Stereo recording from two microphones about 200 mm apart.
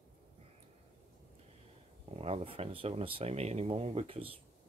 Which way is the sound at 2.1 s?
30° right (ahead or behind).